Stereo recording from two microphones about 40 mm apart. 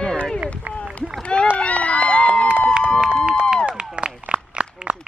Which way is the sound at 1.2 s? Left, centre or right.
Left.